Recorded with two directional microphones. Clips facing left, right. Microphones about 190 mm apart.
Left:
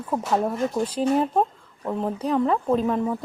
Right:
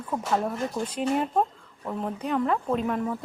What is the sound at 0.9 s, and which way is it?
Speech, 35° left (ahead or behind).